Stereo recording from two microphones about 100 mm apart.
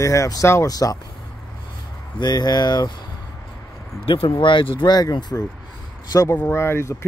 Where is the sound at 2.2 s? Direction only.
45° left (ahead or behind).